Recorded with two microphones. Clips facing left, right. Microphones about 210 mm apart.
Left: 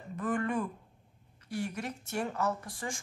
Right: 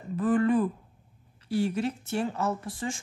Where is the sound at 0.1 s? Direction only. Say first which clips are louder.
Right 8 dB; 30° right (ahead or behind).